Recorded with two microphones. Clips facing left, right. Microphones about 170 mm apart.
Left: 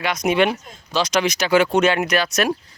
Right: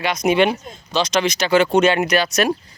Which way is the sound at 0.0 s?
Centre (ahead or behind).